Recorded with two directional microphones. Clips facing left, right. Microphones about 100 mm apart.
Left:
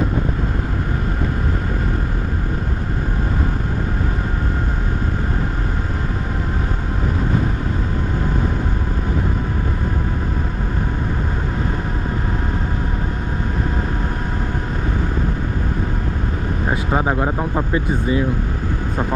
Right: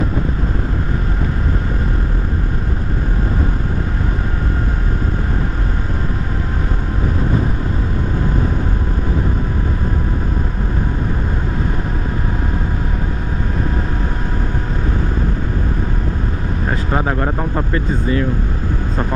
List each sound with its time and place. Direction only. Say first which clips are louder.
16.6 s speech: even; 10° left (ahead or behind)